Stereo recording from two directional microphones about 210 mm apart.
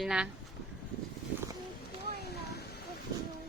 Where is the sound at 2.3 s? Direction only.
50° left (ahead or behind).